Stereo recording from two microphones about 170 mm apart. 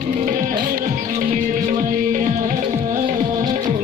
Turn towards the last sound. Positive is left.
turn(degrees=-25)  # may be behind; listen again after turning